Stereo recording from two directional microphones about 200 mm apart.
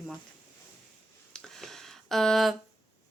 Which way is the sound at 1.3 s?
Centre (ahead or behind).